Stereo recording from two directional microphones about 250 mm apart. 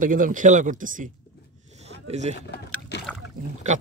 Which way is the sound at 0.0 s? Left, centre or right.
Right.